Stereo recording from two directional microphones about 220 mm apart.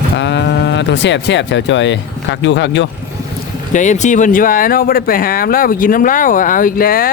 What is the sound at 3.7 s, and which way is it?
Speech, 35° left (ahead or behind).